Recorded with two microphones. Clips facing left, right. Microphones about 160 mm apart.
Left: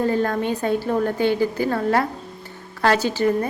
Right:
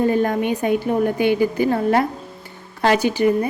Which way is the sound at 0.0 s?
15° right (ahead or behind).